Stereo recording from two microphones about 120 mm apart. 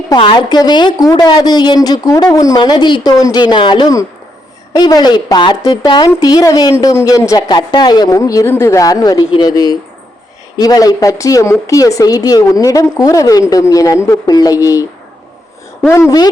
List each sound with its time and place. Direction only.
0.2 s a woman's voice: 40° left (ahead or behind)
15.9 s a woman's voice: 25° left (ahead or behind)